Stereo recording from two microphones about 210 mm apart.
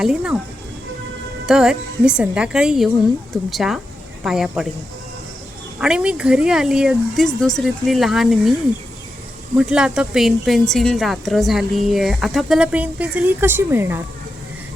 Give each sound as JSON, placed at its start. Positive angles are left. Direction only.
{"t": 0.0, "sound": "speech", "side_deg": -5}
{"t": 1.5, "sound": "speech", "side_deg": -5}
{"t": 5.8, "sound": "speech", "side_deg": -5}
{"t": 9.6, "sound": "speech", "side_deg": -5}